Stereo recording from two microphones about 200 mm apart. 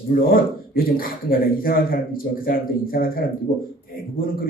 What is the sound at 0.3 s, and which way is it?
Speech, 45° left (ahead or behind).